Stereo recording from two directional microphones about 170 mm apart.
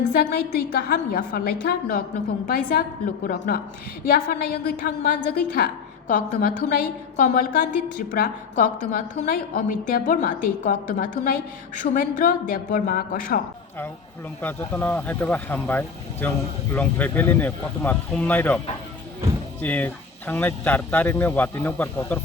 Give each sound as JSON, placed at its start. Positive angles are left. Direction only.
{"t": 0.1, "sound": "a woman's voice", "side_deg": 65}
{"t": 14.4, "sound": "speech", "side_deg": 10}
{"t": 19.6, "sound": "speech", "side_deg": 10}